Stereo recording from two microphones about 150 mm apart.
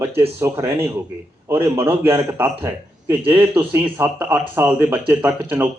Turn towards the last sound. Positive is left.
turn(degrees=-15)  # may be behind; listen again after turning